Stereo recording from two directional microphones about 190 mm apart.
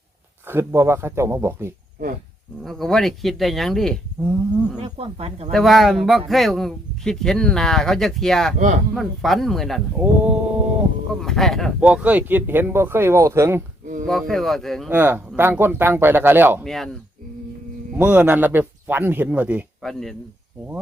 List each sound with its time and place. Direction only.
0.4 s speech: 15° right (ahead or behind)
2.6 s speech: centre (ahead or behind)
4.8 s speech: 30° right (ahead or behind)
5.5 s speech: centre (ahead or behind)
8.5 s speech: 40° right (ahead or behind)
9.0 s speech: centre (ahead or behind)
14.1 s speech: centre (ahead or behind)
14.8 s speech: 10° right (ahead or behind)
16.6 s speech: centre (ahead or behind)
17.9 s speech: 10° right (ahead or behind)